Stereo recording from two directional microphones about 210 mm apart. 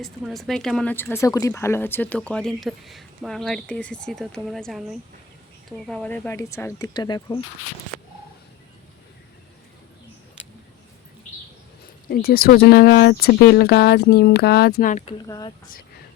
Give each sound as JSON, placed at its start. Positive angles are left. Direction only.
{"t": 0.0, "sound": "speech", "side_deg": 0}
{"t": 12.0, "sound": "speech", "side_deg": 45}
{"t": 15.3, "sound": "speech", "side_deg": 20}